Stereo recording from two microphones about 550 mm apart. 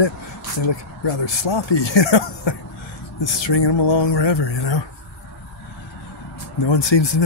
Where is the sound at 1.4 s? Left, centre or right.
Left.